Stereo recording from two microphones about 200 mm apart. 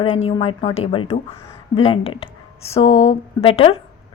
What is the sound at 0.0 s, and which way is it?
A woman's voice, 25° left (ahead or behind).